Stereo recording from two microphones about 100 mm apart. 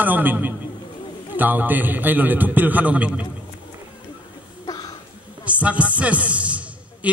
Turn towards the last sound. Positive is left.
turn(degrees=-10)  # may be behind; listen again after turning